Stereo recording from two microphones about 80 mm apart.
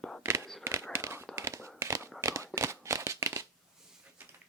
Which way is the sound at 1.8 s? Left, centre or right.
Right.